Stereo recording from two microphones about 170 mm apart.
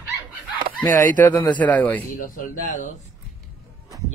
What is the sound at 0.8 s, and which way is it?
A man's voice, 20° left (ahead or behind).